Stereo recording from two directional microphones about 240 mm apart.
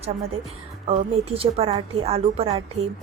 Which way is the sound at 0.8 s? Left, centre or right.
Right.